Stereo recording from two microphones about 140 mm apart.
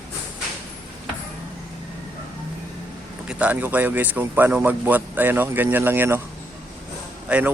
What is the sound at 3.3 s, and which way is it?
Speech, 10° right (ahead or behind).